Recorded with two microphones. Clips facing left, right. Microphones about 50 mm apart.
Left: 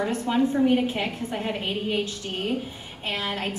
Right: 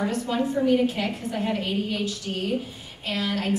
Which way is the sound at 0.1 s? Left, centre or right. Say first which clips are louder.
Left 2 dB; left.